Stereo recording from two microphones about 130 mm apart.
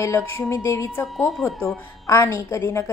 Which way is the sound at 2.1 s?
20° left (ahead or behind).